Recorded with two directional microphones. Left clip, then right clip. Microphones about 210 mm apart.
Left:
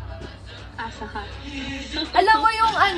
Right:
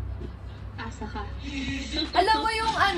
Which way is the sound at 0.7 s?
25° left (ahead or behind).